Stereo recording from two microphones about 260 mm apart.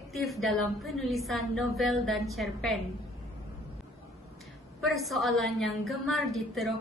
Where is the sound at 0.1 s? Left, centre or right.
Centre.